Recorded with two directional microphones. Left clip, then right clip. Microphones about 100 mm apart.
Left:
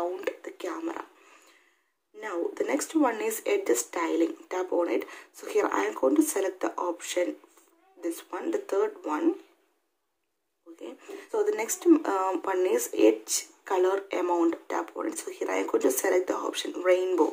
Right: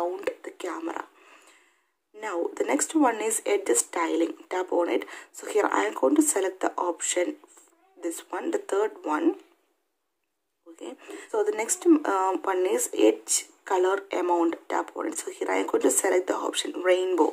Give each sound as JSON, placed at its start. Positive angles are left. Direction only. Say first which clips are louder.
{"t": 0.0, "sound": "a sound", "louder": "right 2 dB", "side_deg": -30}
{"t": 2.1, "sound": "speech", "louder": "right 2 dB", "side_deg": -40}
{"t": 11.0, "sound": "speech", "louder": "right 1 dB", "side_deg": -35}